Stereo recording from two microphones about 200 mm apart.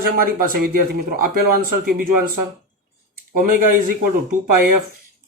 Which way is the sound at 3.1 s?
45° right (ahead or behind).